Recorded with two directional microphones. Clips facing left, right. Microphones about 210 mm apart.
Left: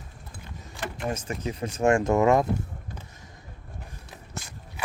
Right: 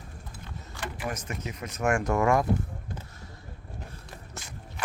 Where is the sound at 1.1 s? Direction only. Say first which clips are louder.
Left 7 dB; 30° left (ahead or behind).